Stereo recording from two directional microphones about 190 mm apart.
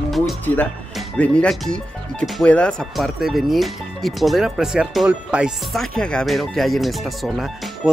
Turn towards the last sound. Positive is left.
turn(degrees=0)  # may be behind; listen again after turning